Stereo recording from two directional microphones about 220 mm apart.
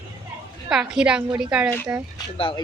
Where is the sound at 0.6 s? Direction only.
5° right (ahead or behind).